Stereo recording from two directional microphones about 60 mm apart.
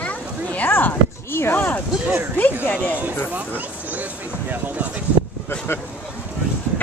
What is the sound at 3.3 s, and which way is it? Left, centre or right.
Speech, right.